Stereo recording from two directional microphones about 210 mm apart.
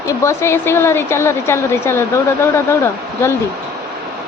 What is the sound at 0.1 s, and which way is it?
A woman's voice, 15° left (ahead or behind).